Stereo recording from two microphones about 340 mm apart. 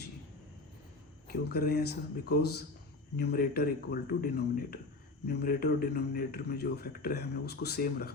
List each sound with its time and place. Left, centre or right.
1.5 s a man's voice: left